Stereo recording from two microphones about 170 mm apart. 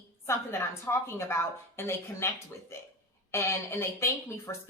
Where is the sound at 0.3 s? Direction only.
15° left (ahead or behind).